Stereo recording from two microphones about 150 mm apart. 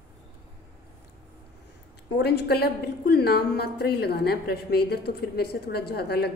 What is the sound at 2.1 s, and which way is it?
A woman's voice, 90° left.